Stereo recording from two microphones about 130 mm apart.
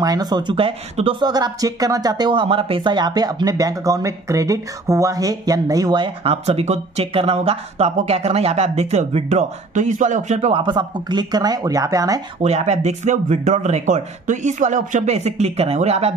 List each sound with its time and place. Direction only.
0.0 s speech: 30° right (ahead or behind)
1.2 s speech: 30° right (ahead or behind)
2.4 s speech: 45° right (ahead or behind); by 10.5 s 65° right (ahead or behind)
10.5 s speech: 40° right (ahead or behind)
12.4 s speech: 55° right (ahead or behind)